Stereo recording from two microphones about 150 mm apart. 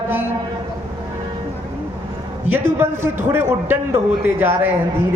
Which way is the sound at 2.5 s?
15° right (ahead or behind).